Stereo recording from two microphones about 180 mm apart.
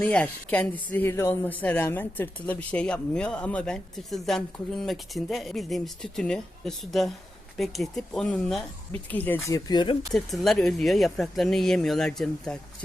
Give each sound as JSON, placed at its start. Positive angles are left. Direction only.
{"t": 0.0, "sound": "speech", "side_deg": 5}
{"t": 10.1, "sound": "speech", "side_deg": 0}